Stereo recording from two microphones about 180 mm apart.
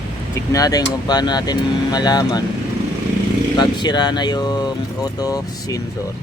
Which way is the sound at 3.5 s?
25° left (ahead or behind).